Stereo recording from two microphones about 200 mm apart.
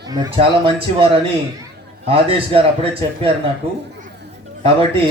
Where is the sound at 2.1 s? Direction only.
30° right (ahead or behind).